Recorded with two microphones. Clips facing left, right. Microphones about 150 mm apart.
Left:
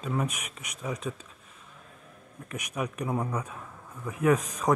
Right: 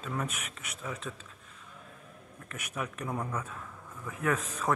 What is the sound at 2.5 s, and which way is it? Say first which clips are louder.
Speech: left 5 dB; 15° left (ahead or behind).